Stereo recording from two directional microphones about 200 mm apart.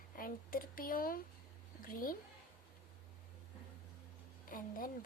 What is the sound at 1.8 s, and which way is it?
Speech, 45° left (ahead or behind).